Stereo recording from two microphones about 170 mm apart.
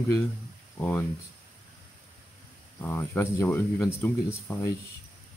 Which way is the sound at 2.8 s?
15° left (ahead or behind).